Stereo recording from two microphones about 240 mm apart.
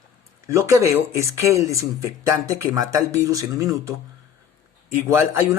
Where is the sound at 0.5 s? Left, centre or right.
Centre.